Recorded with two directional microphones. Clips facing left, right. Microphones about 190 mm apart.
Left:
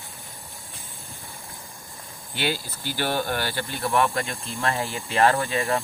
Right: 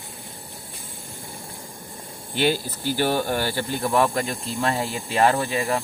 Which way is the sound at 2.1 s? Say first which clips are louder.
Right 6 dB; 45° right (ahead or behind).